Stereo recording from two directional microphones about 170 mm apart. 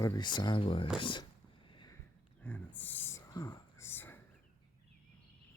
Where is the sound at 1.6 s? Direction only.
25° left (ahead or behind).